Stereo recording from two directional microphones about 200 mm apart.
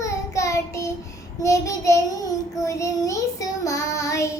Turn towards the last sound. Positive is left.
turn(degrees=15)  # may be behind; listen again after turning